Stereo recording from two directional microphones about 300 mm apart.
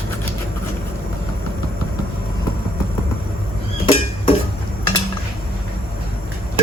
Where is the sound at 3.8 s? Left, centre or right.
Centre.